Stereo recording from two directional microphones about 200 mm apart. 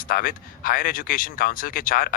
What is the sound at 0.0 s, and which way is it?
Speech, 45° left (ahead or behind).